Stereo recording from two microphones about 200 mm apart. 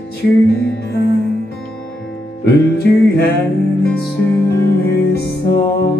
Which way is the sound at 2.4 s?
55° left (ahead or behind).